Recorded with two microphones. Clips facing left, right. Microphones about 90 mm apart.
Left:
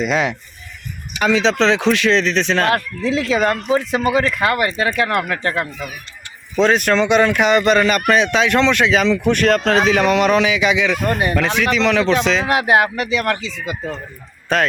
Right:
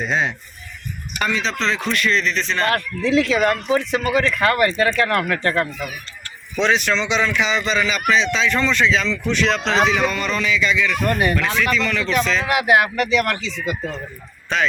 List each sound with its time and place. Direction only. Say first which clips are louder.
0.0 s speech: left 3 dB; 90° left
3.1 s speech: even; 30° left (ahead or behind)
4.3 s speech: even; 10° left (ahead or behind)
6.6 s speech: left 4 dB; 45° left (ahead or behind)
9.9 s speech: left 7 dB; 70° left (ahead or behind)
11.1 s speech: even; 25° left (ahead or behind)
11.6 s speech: left 5 dB; 80° left
12.5 s speech: even; 35° left (ahead or behind)
14.5 s speech: left 4 dB; 45° left (ahead or behind)